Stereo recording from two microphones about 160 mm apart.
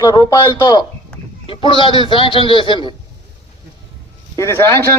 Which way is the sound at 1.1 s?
5° left (ahead or behind).